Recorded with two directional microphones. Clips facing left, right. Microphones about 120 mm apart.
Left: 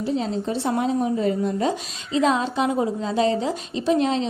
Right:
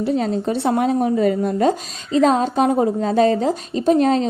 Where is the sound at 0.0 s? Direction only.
60° right (ahead or behind).